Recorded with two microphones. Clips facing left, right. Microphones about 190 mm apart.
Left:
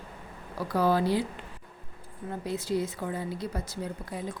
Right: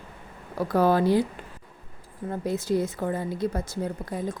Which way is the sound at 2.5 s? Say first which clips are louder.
Right 4 dB; 45° right (ahead or behind).